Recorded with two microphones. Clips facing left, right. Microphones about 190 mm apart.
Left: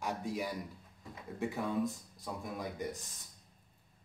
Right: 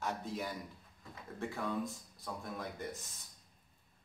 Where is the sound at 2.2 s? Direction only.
15° left (ahead or behind).